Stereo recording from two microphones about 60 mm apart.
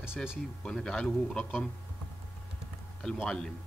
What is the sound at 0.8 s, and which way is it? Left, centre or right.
Speech, centre.